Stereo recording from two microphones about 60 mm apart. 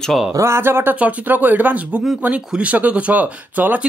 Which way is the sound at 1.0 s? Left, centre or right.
Right.